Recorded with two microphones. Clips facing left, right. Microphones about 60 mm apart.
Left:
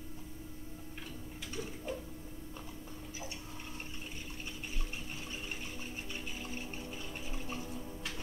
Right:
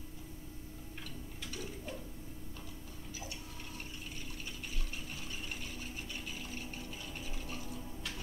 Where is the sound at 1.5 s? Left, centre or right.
Left.